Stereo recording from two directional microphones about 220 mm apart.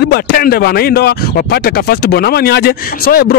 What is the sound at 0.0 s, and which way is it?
Speech, 45° left (ahead or behind).